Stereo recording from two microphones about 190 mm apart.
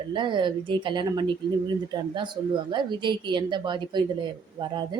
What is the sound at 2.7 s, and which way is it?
Speech, 25° right (ahead or behind).